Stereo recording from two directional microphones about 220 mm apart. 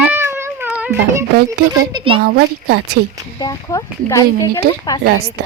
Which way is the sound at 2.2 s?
45° right (ahead or behind).